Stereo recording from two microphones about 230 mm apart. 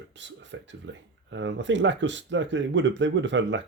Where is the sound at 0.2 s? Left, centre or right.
Right.